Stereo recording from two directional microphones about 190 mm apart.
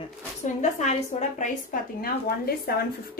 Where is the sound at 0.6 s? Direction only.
40° left (ahead or behind).